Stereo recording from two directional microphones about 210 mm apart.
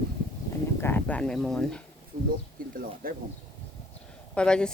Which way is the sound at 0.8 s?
10° left (ahead or behind).